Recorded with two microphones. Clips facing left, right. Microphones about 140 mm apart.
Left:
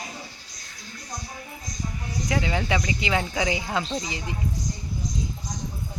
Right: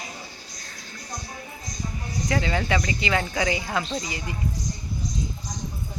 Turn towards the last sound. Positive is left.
turn(degrees=20)  # may be behind; listen again after turning